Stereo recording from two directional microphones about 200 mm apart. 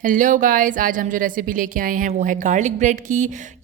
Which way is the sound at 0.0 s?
40° right (ahead or behind).